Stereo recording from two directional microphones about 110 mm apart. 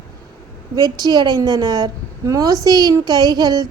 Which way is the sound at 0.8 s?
35° right (ahead or behind).